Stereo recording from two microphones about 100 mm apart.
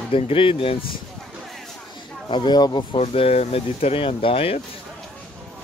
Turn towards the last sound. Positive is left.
turn(degrees=65)  # may be behind; listen again after turning